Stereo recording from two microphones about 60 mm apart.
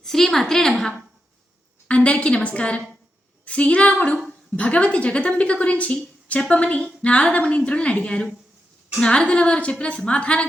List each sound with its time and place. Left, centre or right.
0.0 s a woman's voice: centre
1.9 s a woman's voice: centre